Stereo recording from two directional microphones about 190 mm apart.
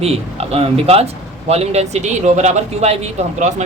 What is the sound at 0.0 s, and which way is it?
A man's voice, 30° right (ahead or behind).